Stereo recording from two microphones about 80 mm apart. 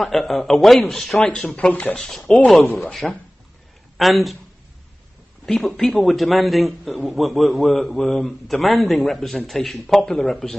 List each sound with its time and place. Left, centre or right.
0.0 s a man's voice: centre
1.7 s speech: centre
2.0 s a man's voice: centre
2.6 s speech: left
2.9 s a man's voice: centre
5.4 s a man's voice: centre